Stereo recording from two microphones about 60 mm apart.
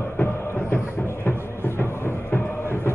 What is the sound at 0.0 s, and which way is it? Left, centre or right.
Music, left.